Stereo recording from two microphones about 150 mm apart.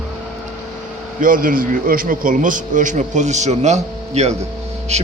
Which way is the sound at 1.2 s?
65° right (ahead or behind).